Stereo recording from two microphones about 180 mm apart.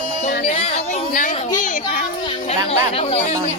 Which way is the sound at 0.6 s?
35° left (ahead or behind).